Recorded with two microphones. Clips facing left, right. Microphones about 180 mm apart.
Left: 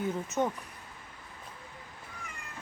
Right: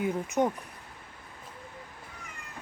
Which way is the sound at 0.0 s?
15° right (ahead or behind).